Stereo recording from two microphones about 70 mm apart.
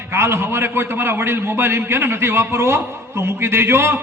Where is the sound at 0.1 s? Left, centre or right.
Right.